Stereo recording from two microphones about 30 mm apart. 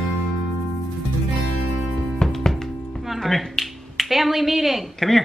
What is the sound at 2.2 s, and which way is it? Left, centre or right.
Music, centre.